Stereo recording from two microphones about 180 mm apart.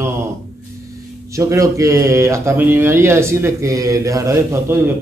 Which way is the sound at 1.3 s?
20° right (ahead or behind).